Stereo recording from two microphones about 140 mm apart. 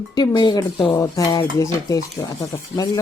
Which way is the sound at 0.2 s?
30° left (ahead or behind).